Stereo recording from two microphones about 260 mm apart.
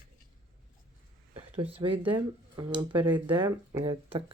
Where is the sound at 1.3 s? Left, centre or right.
Right.